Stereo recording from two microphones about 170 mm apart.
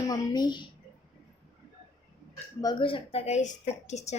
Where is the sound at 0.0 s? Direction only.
25° left (ahead or behind).